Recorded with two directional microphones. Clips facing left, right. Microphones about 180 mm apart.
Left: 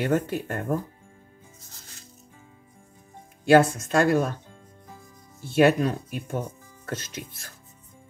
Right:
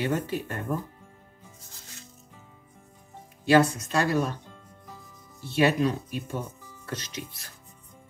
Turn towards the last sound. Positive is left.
turn(degrees=50)  # may be behind; listen again after turning